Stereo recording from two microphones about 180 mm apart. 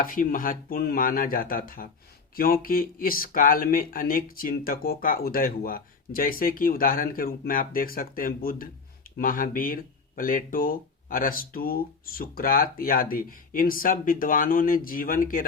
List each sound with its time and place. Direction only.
0.0 s speech: 50° left (ahead or behind)